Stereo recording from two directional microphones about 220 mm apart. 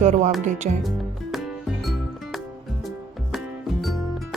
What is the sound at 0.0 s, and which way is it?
Speech, 35° right (ahead or behind).